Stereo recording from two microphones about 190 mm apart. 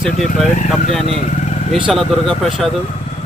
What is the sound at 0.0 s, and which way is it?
Speech, centre (ahead or behind).